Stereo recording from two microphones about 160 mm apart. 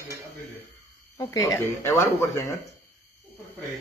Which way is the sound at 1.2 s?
20° left (ahead or behind).